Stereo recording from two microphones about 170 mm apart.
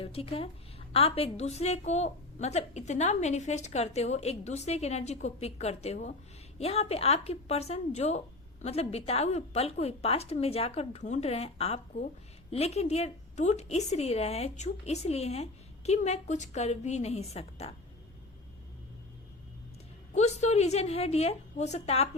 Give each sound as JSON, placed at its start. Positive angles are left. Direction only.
{"t": 0.0, "sound": "a woman's voice", "side_deg": 35}
{"t": 20.1, "sound": "a woman's voice", "side_deg": 40}